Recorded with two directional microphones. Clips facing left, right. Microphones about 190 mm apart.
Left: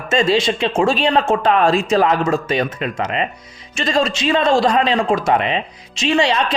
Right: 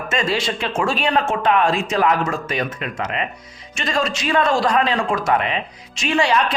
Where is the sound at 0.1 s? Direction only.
25° left (ahead or behind).